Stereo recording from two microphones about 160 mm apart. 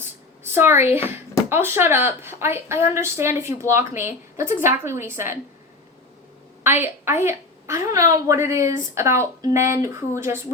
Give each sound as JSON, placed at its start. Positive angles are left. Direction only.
{"t": 0.4, "sound": "a woman's voice", "side_deg": -15}
{"t": 6.6, "sound": "a woman's voice", "side_deg": -15}